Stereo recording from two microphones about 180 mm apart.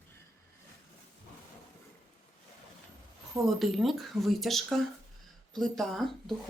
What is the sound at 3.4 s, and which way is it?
Speech, centre (ahead or behind).